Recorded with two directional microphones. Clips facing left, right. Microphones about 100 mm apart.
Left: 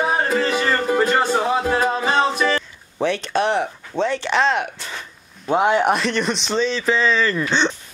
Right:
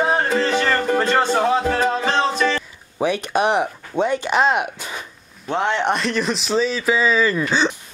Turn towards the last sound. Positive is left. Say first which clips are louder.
# right 1 dB
turn(degrees=-5)  # may be behind; listen again after turning